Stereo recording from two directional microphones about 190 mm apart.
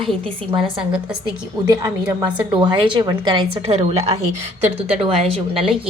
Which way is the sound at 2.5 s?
25° right (ahead or behind).